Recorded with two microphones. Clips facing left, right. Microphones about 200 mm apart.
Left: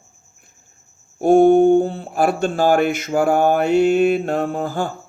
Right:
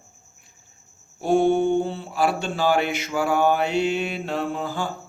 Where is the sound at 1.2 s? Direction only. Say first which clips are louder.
Left 8 dB; 50° left (ahead or behind).